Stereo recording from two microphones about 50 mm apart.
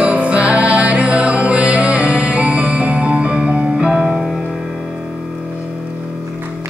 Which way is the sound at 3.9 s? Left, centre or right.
Centre.